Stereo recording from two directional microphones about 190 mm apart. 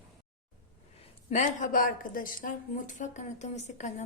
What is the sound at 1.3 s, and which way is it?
A woman's voice, 40° left (ahead or behind).